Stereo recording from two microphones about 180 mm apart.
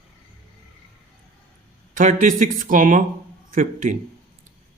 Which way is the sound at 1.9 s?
50° right (ahead or behind).